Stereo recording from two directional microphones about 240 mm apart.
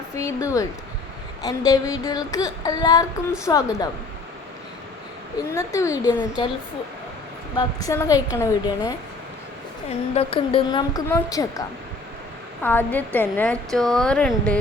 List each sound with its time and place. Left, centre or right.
0.2 s child singing: centre
5.5 s child singing: centre
7.5 s child singing: centre
10.2 s child singing: left
12.6 s child singing: centre
13.1 s speech: centre